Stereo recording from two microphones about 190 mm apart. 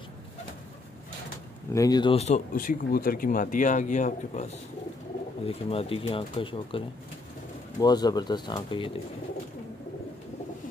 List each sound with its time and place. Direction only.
1.7 s speech: 20° left (ahead or behind); by 4.5 s 40° left (ahead or behind)
5.5 s speech: 30° left (ahead or behind)
7.8 s speech: 20° left (ahead or behind)